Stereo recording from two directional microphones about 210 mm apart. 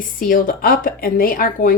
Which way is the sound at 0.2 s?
40° left (ahead or behind).